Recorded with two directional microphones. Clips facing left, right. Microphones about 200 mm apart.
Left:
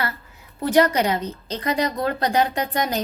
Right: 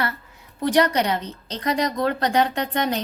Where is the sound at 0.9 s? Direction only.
5° left (ahead or behind).